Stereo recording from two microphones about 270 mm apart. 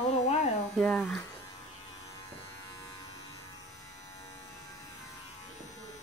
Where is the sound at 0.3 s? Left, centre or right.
Left.